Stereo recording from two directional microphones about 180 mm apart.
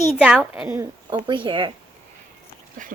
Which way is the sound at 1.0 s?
25° right (ahead or behind).